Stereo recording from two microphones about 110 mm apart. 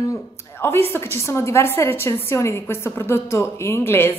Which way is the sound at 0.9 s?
20° left (ahead or behind).